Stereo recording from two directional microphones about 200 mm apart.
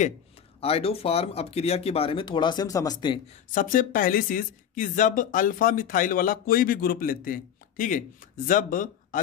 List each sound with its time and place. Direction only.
0.6 s speech: 30° left (ahead or behind)
3.5 s speech: 45° left (ahead or behind)